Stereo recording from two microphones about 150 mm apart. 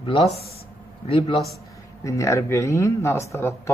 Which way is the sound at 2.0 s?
20° left (ahead or behind).